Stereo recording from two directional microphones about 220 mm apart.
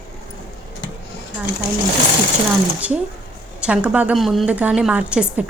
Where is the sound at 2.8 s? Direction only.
5° right (ahead or behind).